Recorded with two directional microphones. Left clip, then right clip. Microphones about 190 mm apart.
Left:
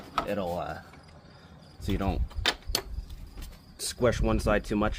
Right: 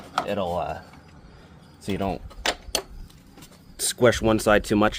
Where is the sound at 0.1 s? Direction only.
40° right (ahead or behind).